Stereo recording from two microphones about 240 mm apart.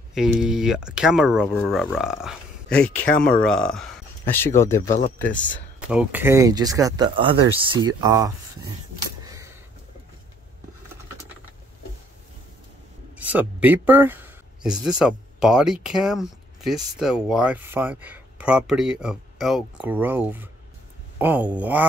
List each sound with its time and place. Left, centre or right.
0.1 s speech: centre
4.8 s speech: left
5.8 s speech: centre
9.2 s a sound: centre
13.2 s speech: centre